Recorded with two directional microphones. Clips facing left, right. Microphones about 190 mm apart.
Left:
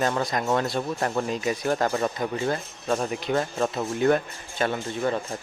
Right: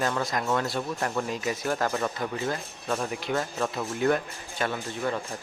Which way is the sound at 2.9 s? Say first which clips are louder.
Left 4 dB; 30° left (ahead or behind).